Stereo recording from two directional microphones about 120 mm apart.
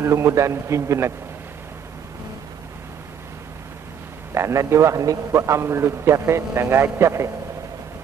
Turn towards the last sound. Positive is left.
turn(degrees=-25)  # may be behind; listen again after turning